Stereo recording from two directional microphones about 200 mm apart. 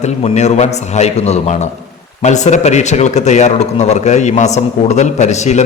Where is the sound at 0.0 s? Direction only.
30° left (ahead or behind).